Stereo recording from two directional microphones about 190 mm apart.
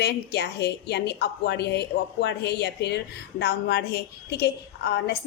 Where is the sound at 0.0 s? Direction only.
60° left (ahead or behind).